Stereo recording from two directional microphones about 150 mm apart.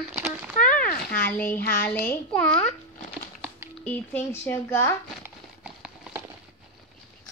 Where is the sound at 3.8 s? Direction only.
10° left (ahead or behind).